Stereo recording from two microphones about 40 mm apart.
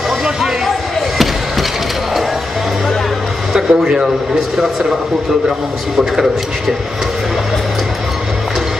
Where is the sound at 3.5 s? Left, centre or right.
Centre.